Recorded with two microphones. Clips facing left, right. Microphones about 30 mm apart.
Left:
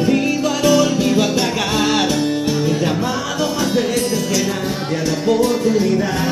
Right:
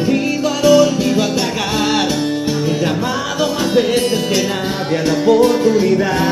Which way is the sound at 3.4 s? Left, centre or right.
Centre.